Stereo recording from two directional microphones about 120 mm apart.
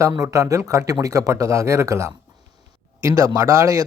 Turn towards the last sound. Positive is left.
turn(degrees=-30)  # may be behind; listen again after turning